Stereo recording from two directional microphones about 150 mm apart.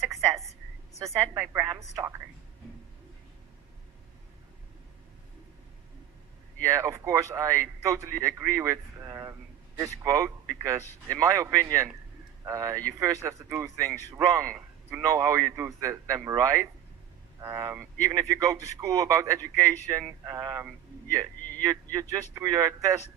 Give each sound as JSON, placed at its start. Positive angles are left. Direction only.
{"t": 1.0, "sound": "a man's voice", "side_deg": -20}
{"t": 6.6, "sound": "a man's voice", "side_deg": -20}